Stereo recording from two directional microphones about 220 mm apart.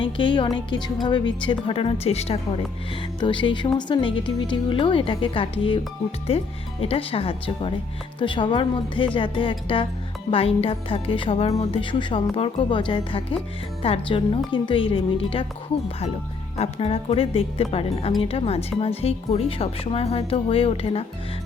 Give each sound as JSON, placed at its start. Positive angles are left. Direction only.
{"t": 0.0, "sound": "speech", "side_deg": 20}
{"t": 16.6, "sound": "speech", "side_deg": 25}